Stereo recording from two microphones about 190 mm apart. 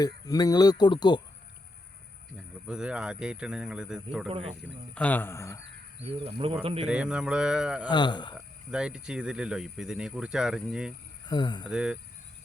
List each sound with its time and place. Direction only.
0.0 s speech: 20° left (ahead or behind)
2.6 s speech: 5° right (ahead or behind)
4.9 s speech: 10° left (ahead or behind)
6.0 s speech: 30° right (ahead or behind)
6.8 s speech: 5° right (ahead or behind)
7.9 s speech: 25° left (ahead or behind)
8.4 s speech: 5° right (ahead or behind)
11.3 s speech: 20° left (ahead or behind)
11.7 s speech: 5° right (ahead or behind)